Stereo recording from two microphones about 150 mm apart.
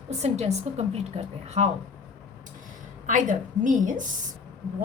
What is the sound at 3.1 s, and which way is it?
Speech, 60° right (ahead or behind).